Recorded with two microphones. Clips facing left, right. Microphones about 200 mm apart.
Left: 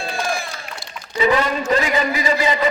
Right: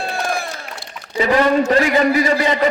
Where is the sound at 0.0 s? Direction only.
60° right (ahead or behind).